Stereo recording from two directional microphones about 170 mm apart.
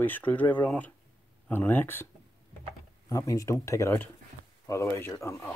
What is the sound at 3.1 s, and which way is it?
Speech, 20° left (ahead or behind).